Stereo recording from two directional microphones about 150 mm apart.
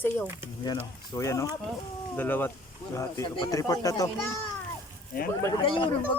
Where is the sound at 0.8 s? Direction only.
20° left (ahead or behind).